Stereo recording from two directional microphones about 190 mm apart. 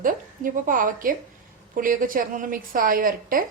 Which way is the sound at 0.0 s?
45° right (ahead or behind).